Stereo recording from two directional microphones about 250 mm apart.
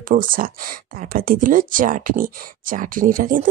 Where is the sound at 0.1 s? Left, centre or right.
Right.